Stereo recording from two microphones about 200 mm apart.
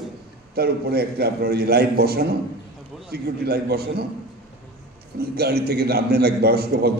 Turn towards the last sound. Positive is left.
turn(degrees=-50)  # may be behind; listen again after turning